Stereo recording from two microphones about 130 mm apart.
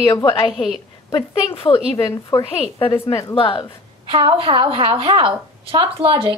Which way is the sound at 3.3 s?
40° left (ahead or behind).